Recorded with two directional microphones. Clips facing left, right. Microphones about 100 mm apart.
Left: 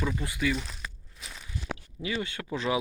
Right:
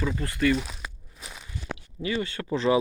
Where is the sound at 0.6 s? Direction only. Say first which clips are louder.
Right 3 dB; 15° right (ahead or behind).